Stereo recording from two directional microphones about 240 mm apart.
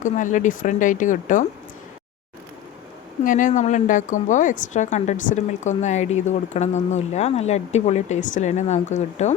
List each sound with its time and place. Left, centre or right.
0.0 s speech: left
3.2 s a woman's voice: left